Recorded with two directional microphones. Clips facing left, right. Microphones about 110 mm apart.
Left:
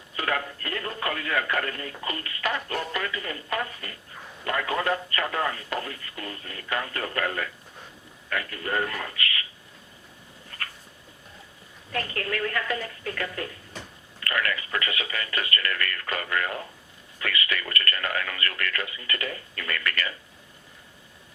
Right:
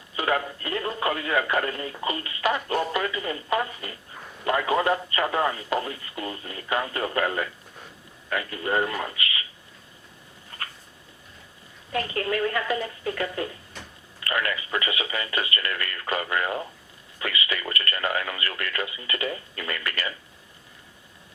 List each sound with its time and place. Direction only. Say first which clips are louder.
0.2 s speech: right 3 dB; 20° right (ahead or behind)
10.5 s a sound: right 1 dB; 20° right (ahead or behind)
11.9 s speech: right 4 dB; 20° right (ahead or behind)